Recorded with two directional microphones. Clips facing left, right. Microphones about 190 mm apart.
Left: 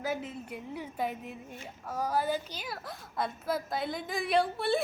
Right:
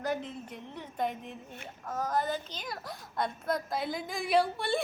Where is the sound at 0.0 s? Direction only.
5° left (ahead or behind).